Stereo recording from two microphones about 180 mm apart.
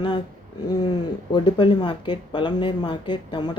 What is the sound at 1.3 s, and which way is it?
Speech, 25° left (ahead or behind).